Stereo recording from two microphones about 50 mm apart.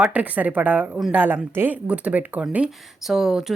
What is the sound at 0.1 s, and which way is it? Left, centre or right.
Speech, right.